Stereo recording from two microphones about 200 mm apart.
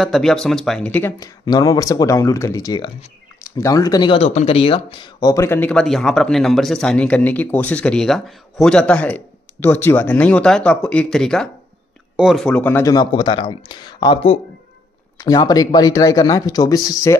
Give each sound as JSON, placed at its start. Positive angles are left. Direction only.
{"t": 0.0, "sound": "speech", "side_deg": 0}